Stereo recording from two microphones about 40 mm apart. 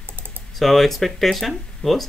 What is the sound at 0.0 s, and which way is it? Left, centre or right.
Typing, right.